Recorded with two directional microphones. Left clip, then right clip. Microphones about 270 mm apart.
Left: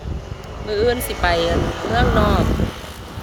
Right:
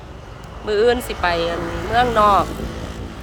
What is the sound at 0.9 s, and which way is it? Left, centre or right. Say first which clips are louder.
Speech: right 1 dB; left.